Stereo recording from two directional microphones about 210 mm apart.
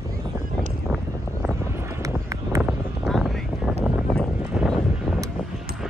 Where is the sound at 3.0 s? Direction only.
Centre (ahead or behind).